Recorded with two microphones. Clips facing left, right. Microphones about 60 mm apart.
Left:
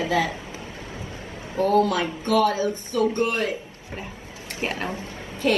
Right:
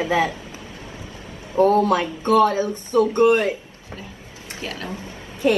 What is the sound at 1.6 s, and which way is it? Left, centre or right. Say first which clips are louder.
Speech: right 4 dB; right.